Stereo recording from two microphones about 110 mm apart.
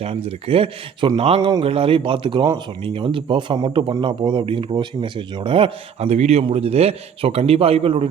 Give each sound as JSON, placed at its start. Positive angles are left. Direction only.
{"t": 0.0, "sound": "speech", "side_deg": -60}
{"t": 1.4, "sound": "a man's voice", "side_deg": -40}
{"t": 1.6, "sound": "speech", "side_deg": -60}